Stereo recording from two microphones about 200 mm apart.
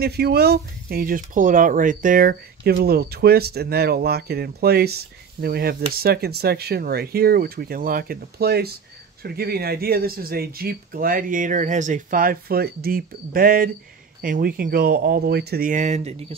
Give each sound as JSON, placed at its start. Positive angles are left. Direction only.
{"t": 0.0, "sound": "speech", "side_deg": -50}